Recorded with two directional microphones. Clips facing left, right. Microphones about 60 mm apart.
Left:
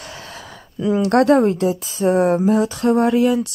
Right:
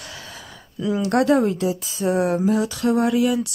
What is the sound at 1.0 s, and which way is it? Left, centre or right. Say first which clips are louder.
Speech: left 4 dB; left.